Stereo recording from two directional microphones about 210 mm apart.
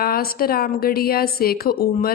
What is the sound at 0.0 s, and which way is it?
A woman's voice, 45° left (ahead or behind).